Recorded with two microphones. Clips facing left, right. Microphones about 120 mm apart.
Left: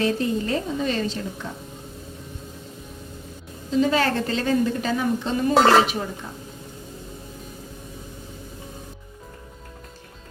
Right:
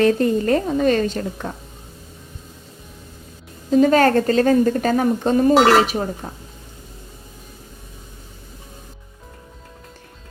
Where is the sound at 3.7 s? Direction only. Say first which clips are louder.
Right 7 dB; 50° right (ahead or behind).